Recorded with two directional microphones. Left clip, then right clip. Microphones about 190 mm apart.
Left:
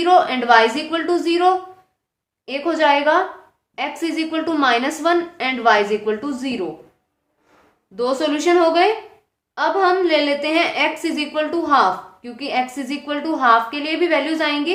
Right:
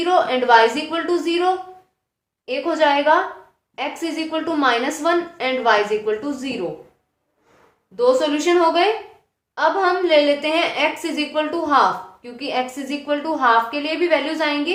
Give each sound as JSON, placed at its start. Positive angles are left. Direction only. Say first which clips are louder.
{"t": 0.0, "sound": "a woman's voice", "louder": "left 2 dB", "side_deg": 25}
{"t": 7.9, "sound": "a woman's voice", "louder": "right 3 dB", "side_deg": 25}